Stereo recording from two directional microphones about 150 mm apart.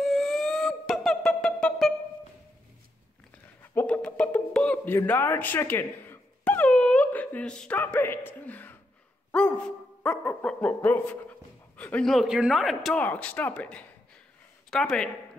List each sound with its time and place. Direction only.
0.0 s music: centre (ahead or behind)
3.7 s a sound: 10° left (ahead or behind)
8.3 s speech: 10° left (ahead or behind)
10.0 s a man's voice: 10° left (ahead or behind)
13.0 s speech: 10° left (ahead or behind)